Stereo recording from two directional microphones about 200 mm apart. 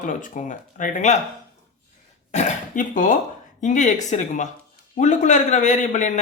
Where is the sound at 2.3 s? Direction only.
40° left (ahead or behind).